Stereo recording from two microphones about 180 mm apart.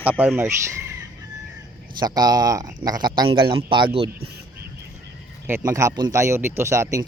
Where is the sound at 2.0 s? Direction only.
20° right (ahead or behind).